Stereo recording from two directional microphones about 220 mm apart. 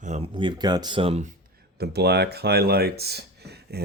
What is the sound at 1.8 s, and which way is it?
Speech, 50° right (ahead or behind).